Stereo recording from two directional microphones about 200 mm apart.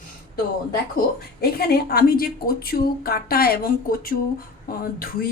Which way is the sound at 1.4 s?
50° left (ahead or behind).